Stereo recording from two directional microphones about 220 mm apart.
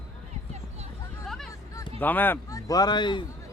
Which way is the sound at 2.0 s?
10° left (ahead or behind).